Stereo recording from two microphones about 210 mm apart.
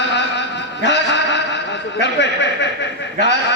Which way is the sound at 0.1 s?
55° left (ahead or behind).